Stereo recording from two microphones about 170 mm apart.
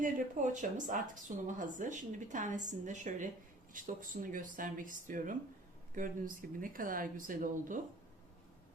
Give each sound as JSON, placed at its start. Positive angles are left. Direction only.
{"t": 0.0, "sound": "speech", "side_deg": -45}